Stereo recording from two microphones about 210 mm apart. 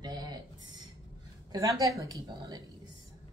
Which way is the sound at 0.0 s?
20° right (ahead or behind).